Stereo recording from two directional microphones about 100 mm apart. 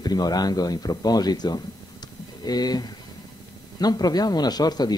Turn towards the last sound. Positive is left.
turn(degrees=45)  # may be behind; listen again after turning